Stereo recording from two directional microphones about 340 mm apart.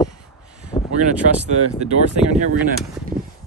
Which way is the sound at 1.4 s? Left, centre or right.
Centre.